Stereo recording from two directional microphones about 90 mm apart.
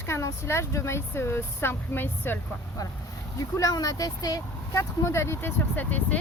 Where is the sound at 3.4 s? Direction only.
40° left (ahead or behind).